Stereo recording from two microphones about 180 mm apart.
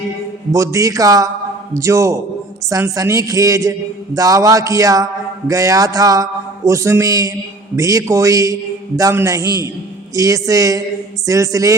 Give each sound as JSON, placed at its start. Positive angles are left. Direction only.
{"t": 0.5, "sound": "a man's voice", "side_deg": -15}